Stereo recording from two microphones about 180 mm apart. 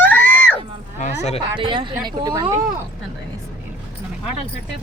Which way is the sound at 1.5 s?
25° right (ahead or behind).